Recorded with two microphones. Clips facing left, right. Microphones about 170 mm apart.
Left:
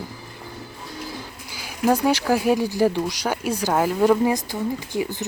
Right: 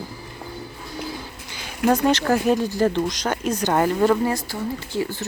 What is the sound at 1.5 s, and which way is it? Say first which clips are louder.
Speech: even; 10° left (ahead or behind).